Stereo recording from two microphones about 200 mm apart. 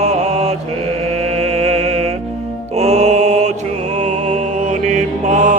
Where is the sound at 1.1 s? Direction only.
30° right (ahead or behind).